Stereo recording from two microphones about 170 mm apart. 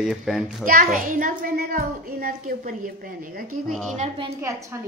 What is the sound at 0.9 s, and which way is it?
A woman's voice, 55° right (ahead or behind).